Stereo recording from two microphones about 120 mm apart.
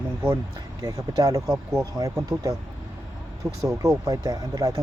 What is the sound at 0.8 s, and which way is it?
Speech, 30° right (ahead or behind).